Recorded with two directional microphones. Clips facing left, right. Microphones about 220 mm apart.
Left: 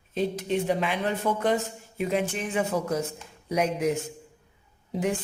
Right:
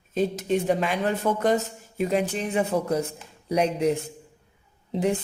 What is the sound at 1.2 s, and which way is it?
Speech, 45° right (ahead or behind).